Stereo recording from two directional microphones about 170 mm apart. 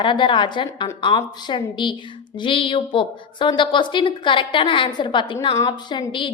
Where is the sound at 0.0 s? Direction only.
30° left (ahead or behind).